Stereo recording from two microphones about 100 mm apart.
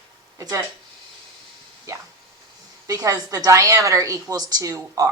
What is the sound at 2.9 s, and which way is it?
A woman's voice, 35° right (ahead or behind).